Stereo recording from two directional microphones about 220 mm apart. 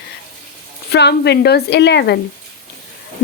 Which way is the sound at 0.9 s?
50° left (ahead or behind).